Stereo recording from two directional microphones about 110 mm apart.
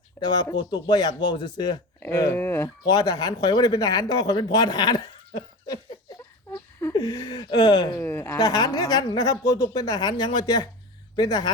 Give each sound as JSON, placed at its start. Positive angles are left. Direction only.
{"t": 0.2, "sound": "speech", "side_deg": 40}
{"t": 2.4, "sound": "speech", "side_deg": 20}
{"t": 2.8, "sound": "speech", "side_deg": 35}
{"t": 6.5, "sound": "a sound", "side_deg": 20}
{"t": 6.9, "sound": "speech", "side_deg": 40}
{"t": 8.0, "sound": "speech", "side_deg": 20}
{"t": 8.3, "sound": "speech", "side_deg": 40}